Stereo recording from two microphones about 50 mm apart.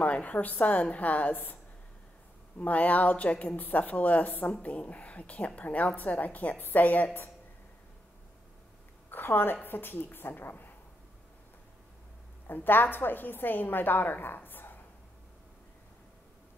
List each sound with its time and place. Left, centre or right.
0.0 s a woman's voice: left
9.1 s a woman's voice: left
12.4 s a woman's voice: left